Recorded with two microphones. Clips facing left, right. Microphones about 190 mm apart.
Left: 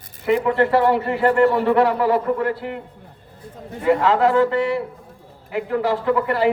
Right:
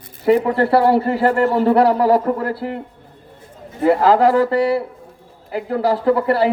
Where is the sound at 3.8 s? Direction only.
35° right (ahead or behind).